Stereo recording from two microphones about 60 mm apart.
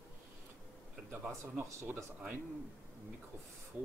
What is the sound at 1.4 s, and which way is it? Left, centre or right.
Speech, right.